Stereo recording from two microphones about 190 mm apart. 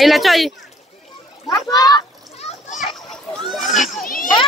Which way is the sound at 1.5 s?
20° left (ahead or behind).